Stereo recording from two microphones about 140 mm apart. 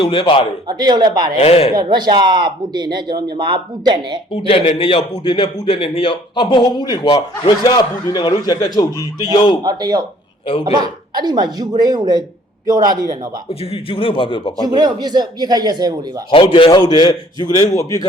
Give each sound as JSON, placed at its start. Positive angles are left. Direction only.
{"t": 0.0, "sound": "a man's voice", "side_deg": 35}
{"t": 0.7, "sound": "speech", "side_deg": -30}
{"t": 1.4, "sound": "speech", "side_deg": 45}
{"t": 1.7, "sound": "speech", "side_deg": -30}
{"t": 4.3, "sound": "a man's voice", "side_deg": 45}
{"t": 9.6, "sound": "speech", "side_deg": -30}
{"t": 13.5, "sound": "a man's voice", "side_deg": 45}
{"t": 14.6, "sound": "speech", "side_deg": -30}
{"t": 16.3, "sound": "a man's voice", "side_deg": 40}